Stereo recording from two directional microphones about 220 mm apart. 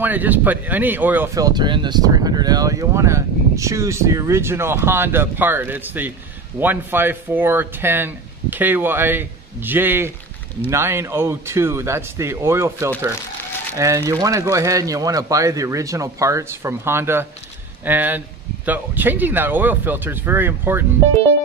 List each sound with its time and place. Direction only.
0.0 s speech: 10° right (ahead or behind)